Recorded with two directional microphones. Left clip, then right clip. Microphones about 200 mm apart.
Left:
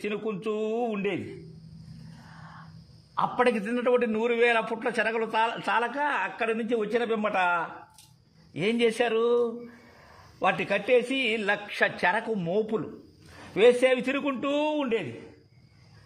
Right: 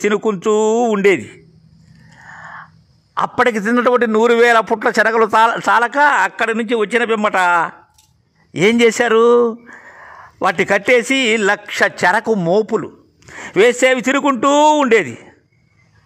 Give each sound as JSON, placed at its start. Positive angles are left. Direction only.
{"t": 0.0, "sound": "a man's voice", "side_deg": -45}
{"t": 2.3, "sound": "a sound", "side_deg": -45}
{"t": 3.2, "sound": "a man's voice", "side_deg": -40}